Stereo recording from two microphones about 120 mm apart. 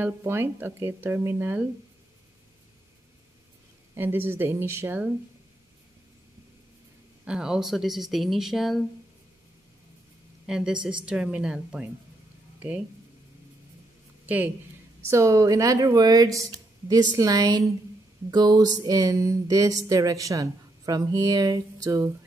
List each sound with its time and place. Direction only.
0.0 s speech: 20° right (ahead or behind)
3.9 s speech: 20° right (ahead or behind)
7.2 s speech: 5° right (ahead or behind)
10.4 s a woman's voice: 5° right (ahead or behind)
14.2 s a woman's voice: 15° right (ahead or behind)
15.0 s a sound: 25° right (ahead or behind)